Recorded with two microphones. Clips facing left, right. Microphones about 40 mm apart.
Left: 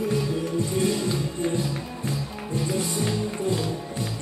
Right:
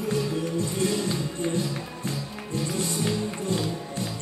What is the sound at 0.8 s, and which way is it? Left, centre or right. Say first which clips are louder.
Music: even; centre.